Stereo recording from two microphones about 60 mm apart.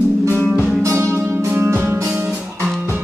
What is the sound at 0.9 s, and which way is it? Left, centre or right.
Music, right.